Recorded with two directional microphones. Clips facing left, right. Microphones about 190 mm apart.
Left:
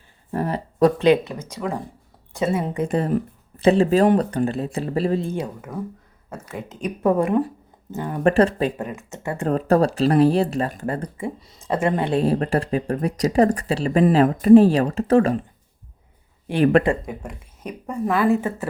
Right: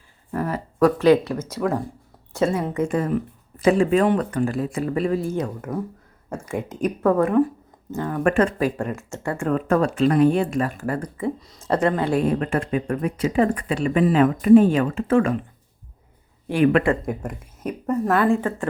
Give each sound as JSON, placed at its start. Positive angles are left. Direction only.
{"t": 0.3, "sound": "speech", "side_deg": 30}
{"t": 1.5, "sound": "speech", "side_deg": -5}
{"t": 2.5, "sound": "speech", "side_deg": 20}
{"t": 2.8, "sound": "speech", "side_deg": 35}
{"t": 5.3, "sound": "speech", "side_deg": 10}
{"t": 6.3, "sound": "speech", "side_deg": -15}
{"t": 7.0, "sound": "speech", "side_deg": 15}
{"t": 8.2, "sound": "speech", "side_deg": 30}
{"t": 9.0, "sound": "speech", "side_deg": 20}
{"t": 9.4, "sound": "speech", "side_deg": 35}
{"t": 12.2, "sound": "speech", "side_deg": 35}
{"t": 16.6, "sound": "speech", "side_deg": 35}
{"t": 17.1, "sound": "speech", "side_deg": -5}